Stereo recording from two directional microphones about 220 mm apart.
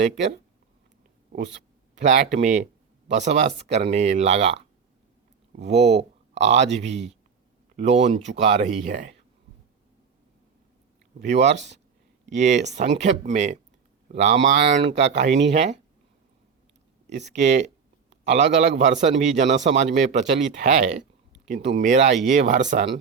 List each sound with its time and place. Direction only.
1.3 s speech: 45° right (ahead or behind)
2.0 s a man's voice: 30° right (ahead or behind)
5.6 s speech: 30° right (ahead or behind)
11.2 s a man's voice: 35° right (ahead or behind)
11.5 s speech: 55° right (ahead or behind)
12.3 s a man's voice: 35° right (ahead or behind)
15.3 s speech: 55° right (ahead or behind)
15.5 s speech: 30° right (ahead or behind)
17.3 s a man's voice: 30° right (ahead or behind)